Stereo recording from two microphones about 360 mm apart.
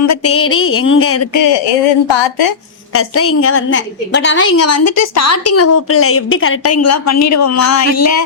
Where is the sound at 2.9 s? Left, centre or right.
Left.